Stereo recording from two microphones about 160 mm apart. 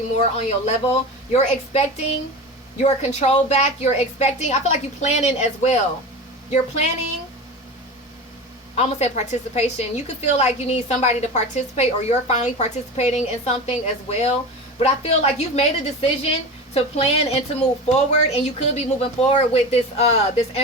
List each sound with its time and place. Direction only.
0.6 s a woman's voice: 40° left (ahead or behind)
8.7 s a woman's voice: 45° left (ahead or behind)